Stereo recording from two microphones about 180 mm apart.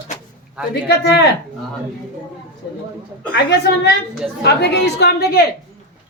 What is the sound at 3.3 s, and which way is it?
A woman's voice, 70° left (ahead or behind).